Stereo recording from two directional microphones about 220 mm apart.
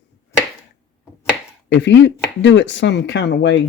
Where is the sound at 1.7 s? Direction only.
55° left (ahead or behind).